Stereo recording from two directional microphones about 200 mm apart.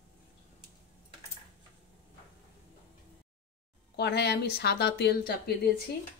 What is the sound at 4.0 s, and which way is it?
A woman's voice, 55° left (ahead or behind).